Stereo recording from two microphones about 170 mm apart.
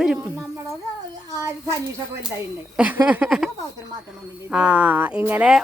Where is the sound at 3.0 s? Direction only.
5° right (ahead or behind).